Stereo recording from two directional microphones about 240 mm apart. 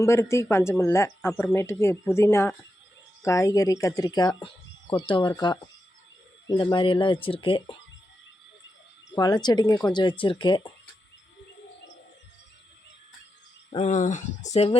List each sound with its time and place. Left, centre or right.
0.0 s speech: centre
9.1 s speech: centre
13.7 s speech: left